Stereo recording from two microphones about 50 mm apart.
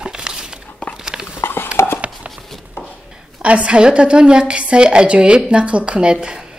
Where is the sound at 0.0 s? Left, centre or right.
Centre.